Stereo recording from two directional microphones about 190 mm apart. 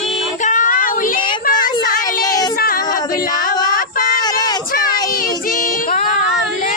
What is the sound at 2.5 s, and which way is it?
Child singing, 50° left (ahead or behind).